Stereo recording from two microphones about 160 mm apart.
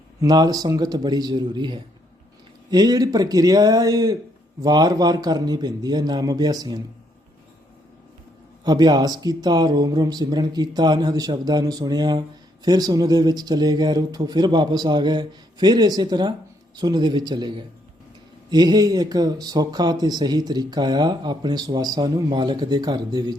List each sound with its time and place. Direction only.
0.2 s speech: 25° right (ahead or behind)
8.6 s speech: 25° right (ahead or behind)